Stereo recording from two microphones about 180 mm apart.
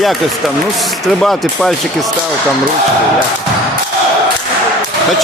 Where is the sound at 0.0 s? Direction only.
Centre (ahead or behind).